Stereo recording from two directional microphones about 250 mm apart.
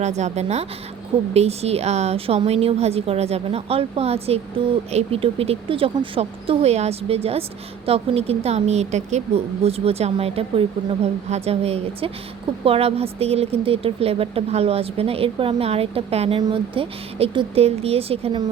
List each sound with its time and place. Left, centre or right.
0.0 s a woman's voice: right